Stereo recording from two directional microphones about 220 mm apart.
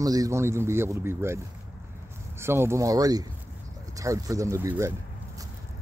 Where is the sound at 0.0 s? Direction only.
15° right (ahead or behind).